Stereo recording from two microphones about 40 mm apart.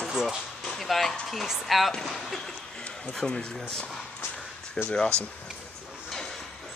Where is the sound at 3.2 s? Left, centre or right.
Centre.